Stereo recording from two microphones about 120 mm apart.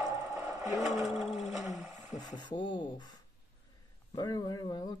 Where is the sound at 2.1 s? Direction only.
35° left (ahead or behind).